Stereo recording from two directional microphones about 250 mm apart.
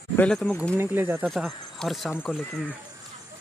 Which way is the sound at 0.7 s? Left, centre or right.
Centre.